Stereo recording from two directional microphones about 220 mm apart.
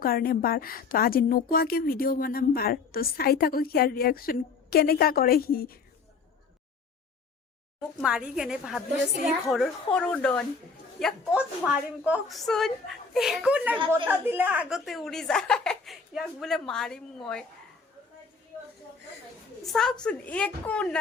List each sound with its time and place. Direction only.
0.0 s a woman's voice: 40° left (ahead or behind)
7.8 s speech: 5° right (ahead or behind)
19.6 s speech: centre (ahead or behind)